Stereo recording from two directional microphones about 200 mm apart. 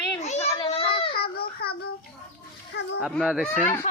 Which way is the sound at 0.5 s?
25° left (ahead or behind).